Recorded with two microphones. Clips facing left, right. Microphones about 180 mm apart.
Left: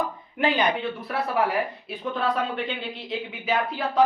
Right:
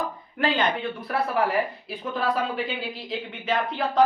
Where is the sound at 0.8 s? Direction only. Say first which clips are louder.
Right 1 dB; centre (ahead or behind).